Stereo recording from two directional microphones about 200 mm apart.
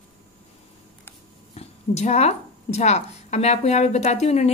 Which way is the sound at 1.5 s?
35° left (ahead or behind).